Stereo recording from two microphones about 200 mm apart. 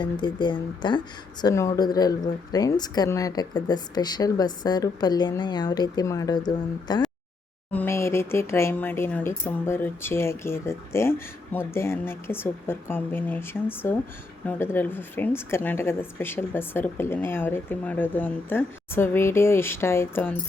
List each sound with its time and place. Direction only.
0.0 s a woman's voice: 20° left (ahead or behind)